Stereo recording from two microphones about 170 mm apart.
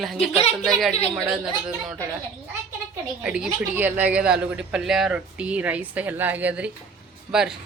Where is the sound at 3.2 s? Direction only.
5° right (ahead or behind).